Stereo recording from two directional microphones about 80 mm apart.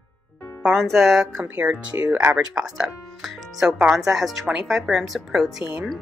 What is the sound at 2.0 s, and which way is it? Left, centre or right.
Speech, right.